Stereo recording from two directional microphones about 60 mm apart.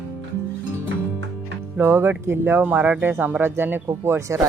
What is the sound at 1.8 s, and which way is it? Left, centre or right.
Speech, right.